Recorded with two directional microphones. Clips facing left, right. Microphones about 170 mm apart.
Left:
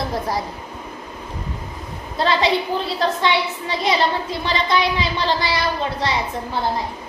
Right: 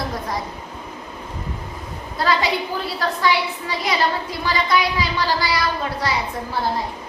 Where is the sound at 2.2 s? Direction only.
25° left (ahead or behind).